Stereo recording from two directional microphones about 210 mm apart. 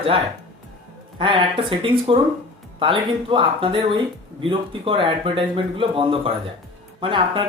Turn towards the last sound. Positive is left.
turn(degrees=-25)  # may be behind; listen again after turning